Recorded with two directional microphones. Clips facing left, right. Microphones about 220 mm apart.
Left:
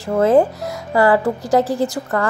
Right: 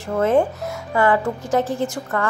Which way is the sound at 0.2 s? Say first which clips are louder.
Left 4 dB; 35° left (ahead or behind).